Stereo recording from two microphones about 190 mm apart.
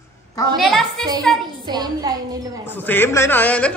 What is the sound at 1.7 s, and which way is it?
Speech, 20° right (ahead or behind).